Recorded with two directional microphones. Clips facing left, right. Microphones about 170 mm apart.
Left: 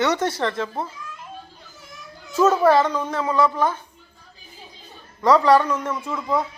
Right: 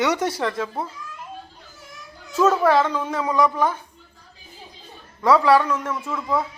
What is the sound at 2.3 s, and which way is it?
Speech, centre (ahead or behind).